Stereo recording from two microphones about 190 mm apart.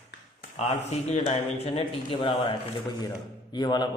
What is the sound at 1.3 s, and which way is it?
Speech, 30° left (ahead or behind).